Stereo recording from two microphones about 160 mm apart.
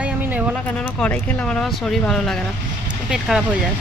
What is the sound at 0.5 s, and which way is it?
Speech, 10° left (ahead or behind).